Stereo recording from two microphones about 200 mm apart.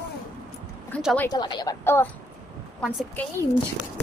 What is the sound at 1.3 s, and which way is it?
Speech, 20° left (ahead or behind).